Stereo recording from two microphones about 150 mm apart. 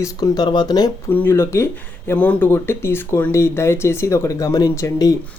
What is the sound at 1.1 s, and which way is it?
Speech, 15° left (ahead or behind).